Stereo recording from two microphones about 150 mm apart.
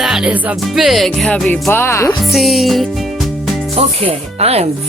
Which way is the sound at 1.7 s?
15° left (ahead or behind).